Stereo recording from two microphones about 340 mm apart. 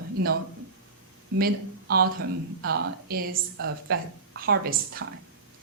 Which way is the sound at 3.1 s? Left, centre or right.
Right.